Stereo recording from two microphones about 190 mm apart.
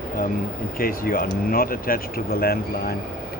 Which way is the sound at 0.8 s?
50° left (ahead or behind).